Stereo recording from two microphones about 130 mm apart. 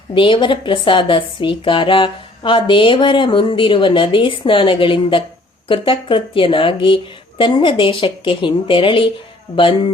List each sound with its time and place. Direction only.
0.1 s a woman's voice: 40° left (ahead or behind)